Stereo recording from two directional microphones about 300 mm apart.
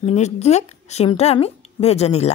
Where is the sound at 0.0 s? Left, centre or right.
Left.